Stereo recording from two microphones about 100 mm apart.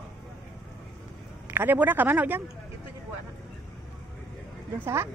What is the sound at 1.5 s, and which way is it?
Speech, 20° right (ahead or behind).